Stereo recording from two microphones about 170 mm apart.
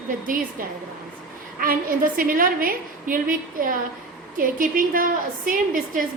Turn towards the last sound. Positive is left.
turn(degrees=-55)  # may be behind; listen again after turning